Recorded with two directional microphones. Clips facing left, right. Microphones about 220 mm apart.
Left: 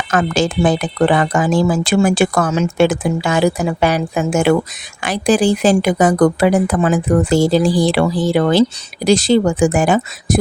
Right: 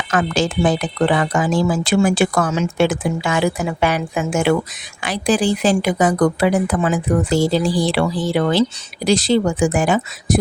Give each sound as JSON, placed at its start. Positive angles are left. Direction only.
{"t": 0.1, "sound": "speech", "side_deg": 45}